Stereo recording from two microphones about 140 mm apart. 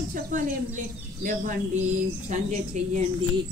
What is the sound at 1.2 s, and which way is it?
Speech, 60° right (ahead or behind).